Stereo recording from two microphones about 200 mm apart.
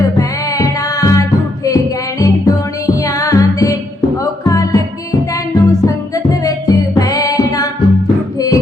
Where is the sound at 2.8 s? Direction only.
15° left (ahead or behind).